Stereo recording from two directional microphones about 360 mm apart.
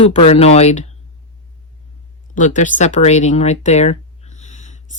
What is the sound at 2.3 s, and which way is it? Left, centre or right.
Speech, left.